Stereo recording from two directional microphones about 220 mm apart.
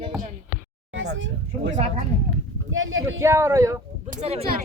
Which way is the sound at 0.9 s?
60° right (ahead or behind).